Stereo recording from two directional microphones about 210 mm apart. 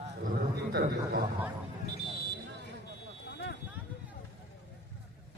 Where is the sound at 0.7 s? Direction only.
50° right (ahead or behind).